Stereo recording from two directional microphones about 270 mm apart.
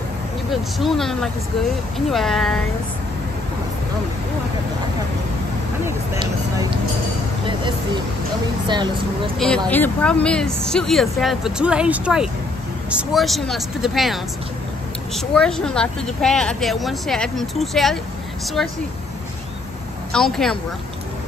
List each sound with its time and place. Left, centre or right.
0.5 s speech: centre
5.9 s speech: centre
9.7 s speech: centre
20.1 s speech: centre